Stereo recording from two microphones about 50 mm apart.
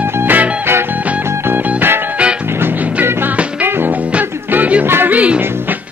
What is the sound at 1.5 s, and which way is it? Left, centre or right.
Music, right.